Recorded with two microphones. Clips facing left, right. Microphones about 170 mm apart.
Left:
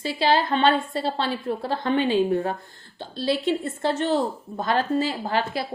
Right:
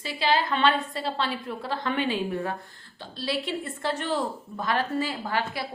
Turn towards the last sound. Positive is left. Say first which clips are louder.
# left 4 dB
turn(degrees=25)  # may be behind; listen again after turning